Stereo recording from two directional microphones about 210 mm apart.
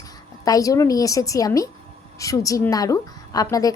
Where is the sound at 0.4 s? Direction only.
15° left (ahead or behind).